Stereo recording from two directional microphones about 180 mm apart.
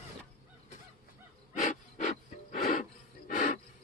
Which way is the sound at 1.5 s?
40° left (ahead or behind).